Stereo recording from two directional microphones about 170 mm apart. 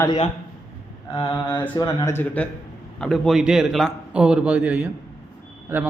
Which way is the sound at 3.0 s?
Centre (ahead or behind).